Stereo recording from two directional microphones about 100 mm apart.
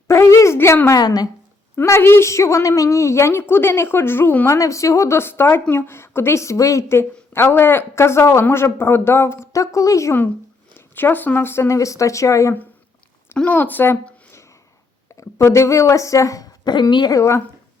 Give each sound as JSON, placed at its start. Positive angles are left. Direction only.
{"t": 0.1, "sound": "a woman's voice", "side_deg": 30}
{"t": 1.7, "sound": "speech", "side_deg": 25}
{"t": 4.4, "sound": "speech", "side_deg": 30}
{"t": 10.8, "sound": "speech", "side_deg": 20}
{"t": 13.3, "sound": "a woman's voice", "side_deg": 15}
{"t": 15.2, "sound": "a woman's voice", "side_deg": 30}
{"t": 17.2, "sound": "speech", "side_deg": 30}